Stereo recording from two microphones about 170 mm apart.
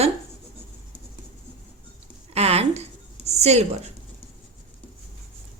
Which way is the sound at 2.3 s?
40° right (ahead or behind).